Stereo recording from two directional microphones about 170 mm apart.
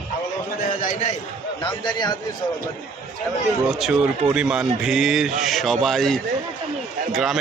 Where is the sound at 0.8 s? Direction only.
45° left (ahead or behind).